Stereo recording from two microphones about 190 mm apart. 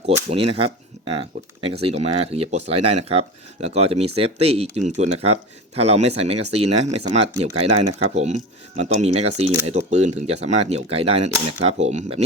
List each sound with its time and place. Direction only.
0.3 s speech: 30° right (ahead or behind)